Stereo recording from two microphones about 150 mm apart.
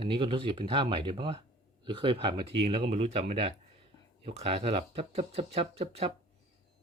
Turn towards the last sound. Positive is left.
turn(degrees=-45)  # may be behind; listen again after turning